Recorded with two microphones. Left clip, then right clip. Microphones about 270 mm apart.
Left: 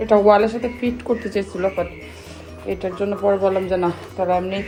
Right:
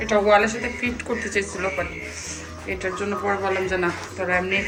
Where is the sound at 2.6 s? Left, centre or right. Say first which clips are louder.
Left 3 dB; centre.